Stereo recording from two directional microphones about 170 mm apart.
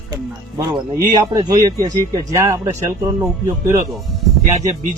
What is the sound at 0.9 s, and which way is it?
Speech, 20° right (ahead or behind).